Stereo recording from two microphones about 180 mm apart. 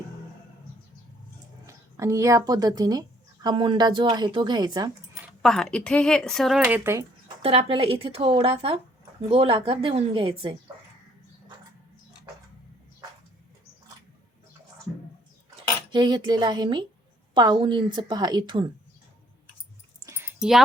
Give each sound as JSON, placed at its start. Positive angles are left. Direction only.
{"t": 1.6, "sound": "a woman's voice", "side_deg": -15}
{"t": 5.4, "sound": "speech", "side_deg": 0}
{"t": 6.6, "sound": "speech", "side_deg": -10}
{"t": 7.4, "sound": "a woman's voice", "side_deg": -30}
{"t": 15.9, "sound": "a woman's voice", "side_deg": -25}
{"t": 20.1, "sound": "a sound", "side_deg": -15}
{"t": 20.4, "sound": "speech", "side_deg": 0}